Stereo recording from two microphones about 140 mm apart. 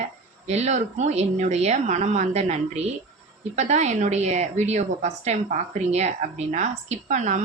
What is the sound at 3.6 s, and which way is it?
Speech, 55° right (ahead or behind).